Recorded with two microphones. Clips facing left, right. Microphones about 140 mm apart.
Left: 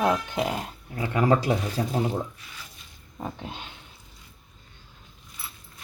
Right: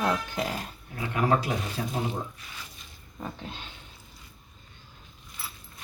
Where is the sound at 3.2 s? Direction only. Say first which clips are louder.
Left 3 dB; 15° left (ahead or behind).